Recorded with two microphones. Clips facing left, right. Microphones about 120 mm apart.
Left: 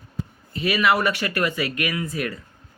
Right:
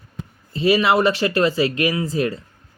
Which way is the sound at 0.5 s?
30° right (ahead or behind).